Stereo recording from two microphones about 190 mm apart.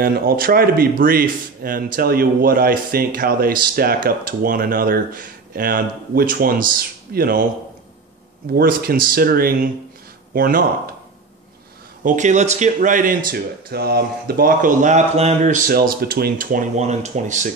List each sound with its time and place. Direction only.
0.0 s speech: 50° right (ahead or behind)
8.5 s speech: 50° right (ahead or behind)
12.0 s speech: 40° right (ahead or behind)